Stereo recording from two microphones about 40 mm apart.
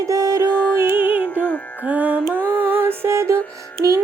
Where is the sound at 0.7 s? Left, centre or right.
Right.